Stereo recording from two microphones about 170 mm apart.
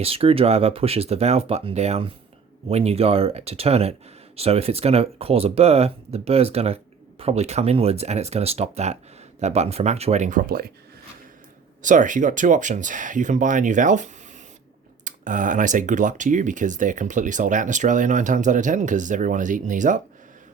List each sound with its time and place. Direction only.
0.0 s speech: 35° right (ahead or behind); by 10.7 s 55° right (ahead or behind)
11.8 s speech: 50° right (ahead or behind)